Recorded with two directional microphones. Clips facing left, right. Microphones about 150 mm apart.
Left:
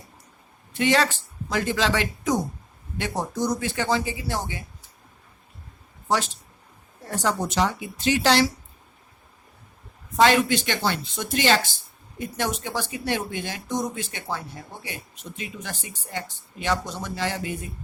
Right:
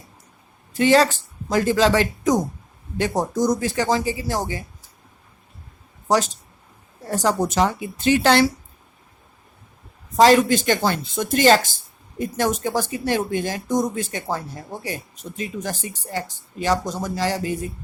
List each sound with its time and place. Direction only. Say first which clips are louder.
0.7 s speech: right 6 dB; 40° right (ahead or behind)
6.1 s speech: right 5 dB; 40° right (ahead or behind)
10.2 s speech: right 5 dB; 40° right (ahead or behind)